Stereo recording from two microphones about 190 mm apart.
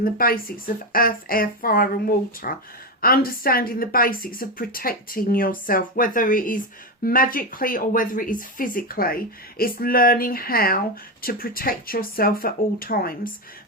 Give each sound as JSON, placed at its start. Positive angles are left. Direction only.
{"t": 0.0, "sound": "speech", "side_deg": 50}